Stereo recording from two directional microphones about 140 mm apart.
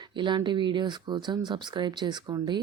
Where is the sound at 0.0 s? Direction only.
35° right (ahead or behind).